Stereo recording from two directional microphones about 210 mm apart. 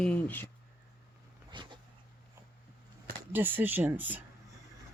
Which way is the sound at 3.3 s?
10° right (ahead or behind).